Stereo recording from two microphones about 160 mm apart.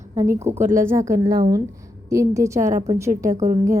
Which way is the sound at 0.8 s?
15° right (ahead or behind).